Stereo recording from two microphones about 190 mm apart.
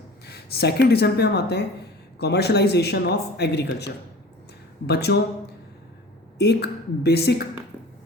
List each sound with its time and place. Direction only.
0.3 s speech: 60° left (ahead or behind)
4.9 s speech: 60° left (ahead or behind)
6.4 s speech: 60° left (ahead or behind)